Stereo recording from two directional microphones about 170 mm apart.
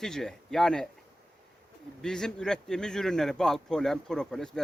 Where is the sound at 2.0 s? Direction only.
5° left (ahead or behind).